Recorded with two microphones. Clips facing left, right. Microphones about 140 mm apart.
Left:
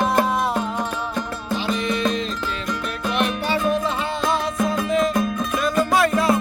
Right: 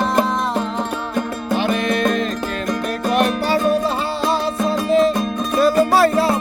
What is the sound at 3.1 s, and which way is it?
Music, 40° right (ahead or behind).